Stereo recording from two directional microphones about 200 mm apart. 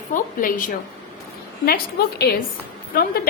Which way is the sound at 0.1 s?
45° left (ahead or behind).